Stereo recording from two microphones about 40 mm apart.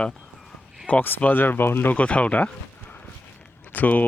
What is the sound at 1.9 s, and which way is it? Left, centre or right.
Speech, left.